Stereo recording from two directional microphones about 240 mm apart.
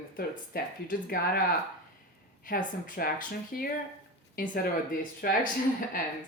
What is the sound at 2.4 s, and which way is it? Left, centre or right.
Speech, left.